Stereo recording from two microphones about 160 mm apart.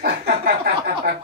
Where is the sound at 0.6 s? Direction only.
70° right (ahead or behind).